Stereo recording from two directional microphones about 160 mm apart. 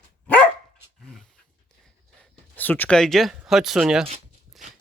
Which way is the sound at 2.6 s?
10° left (ahead or behind).